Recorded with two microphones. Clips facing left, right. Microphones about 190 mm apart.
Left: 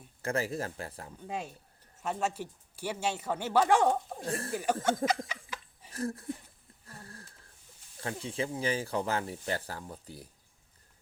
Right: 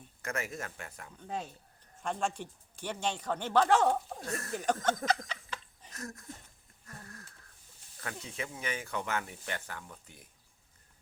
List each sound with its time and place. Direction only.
0.2 s speech: 30° left (ahead or behind)
2.0 s speech: 5° left (ahead or behind)
4.2 s speech: 30° left (ahead or behind)
4.5 s speech: 10° left (ahead or behind)
5.3 s a sound: 10° left (ahead or behind)
5.9 s speech: 30° left (ahead or behind)
6.8 s a sound: 30° left (ahead or behind)
8.0 s speech: 30° left (ahead or behind)